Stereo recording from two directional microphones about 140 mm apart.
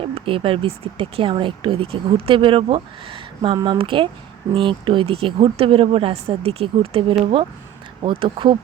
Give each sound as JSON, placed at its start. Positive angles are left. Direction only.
{"t": 0.0, "sound": "speech", "side_deg": -40}